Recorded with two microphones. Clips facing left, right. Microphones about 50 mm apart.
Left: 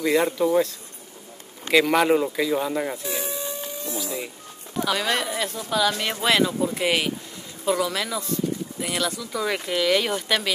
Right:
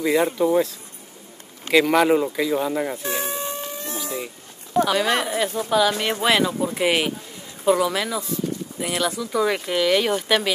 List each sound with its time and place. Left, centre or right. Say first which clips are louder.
0.0 s speech: right 1 dB; centre
3.0 s a sound: right 3 dB; right
4.8 s speech: left 2 dB; centre